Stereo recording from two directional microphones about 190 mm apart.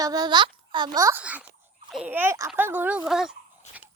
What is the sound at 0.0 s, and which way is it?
A child's voice, 20° right (ahead or behind).